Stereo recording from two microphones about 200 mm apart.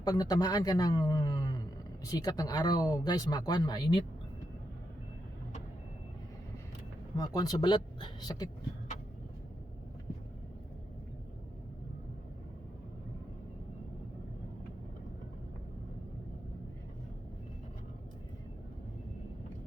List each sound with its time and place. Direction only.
0.0 s speech: 20° left (ahead or behind)
7.2 s speech: 20° left (ahead or behind)